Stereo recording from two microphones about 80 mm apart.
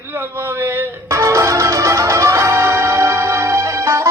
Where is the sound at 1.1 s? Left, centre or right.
Right.